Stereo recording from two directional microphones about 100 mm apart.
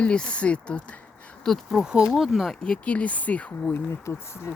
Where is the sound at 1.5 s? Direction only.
Centre (ahead or behind).